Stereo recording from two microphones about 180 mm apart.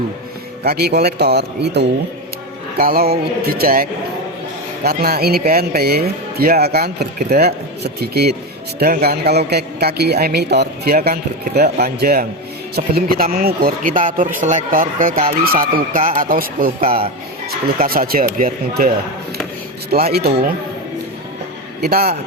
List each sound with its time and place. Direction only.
0.6 s speech: 60° right (ahead or behind)
2.7 s speech: 55° right (ahead or behind)
19.9 s speech: 60° right (ahead or behind)
21.8 s a man's voice: 60° right (ahead or behind)